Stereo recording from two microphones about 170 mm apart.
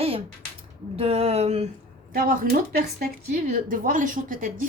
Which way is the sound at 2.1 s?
55° right (ahead or behind).